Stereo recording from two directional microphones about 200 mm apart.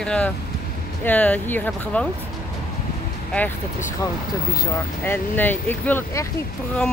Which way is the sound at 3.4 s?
10° left (ahead or behind).